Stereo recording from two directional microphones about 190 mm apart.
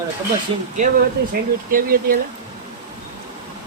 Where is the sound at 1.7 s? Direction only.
50° right (ahead or behind).